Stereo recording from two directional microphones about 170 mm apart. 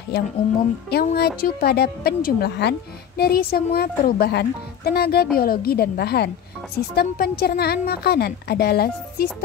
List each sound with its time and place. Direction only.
0.8 s a woman's voice: 70° left (ahead or behind)